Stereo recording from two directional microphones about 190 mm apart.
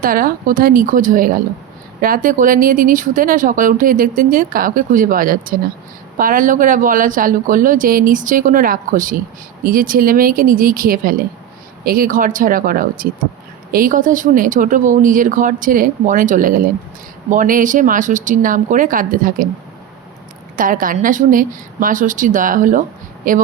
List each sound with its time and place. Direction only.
0.0 s speech: 50° right (ahead or behind)
20.6 s speech: 45° right (ahead or behind)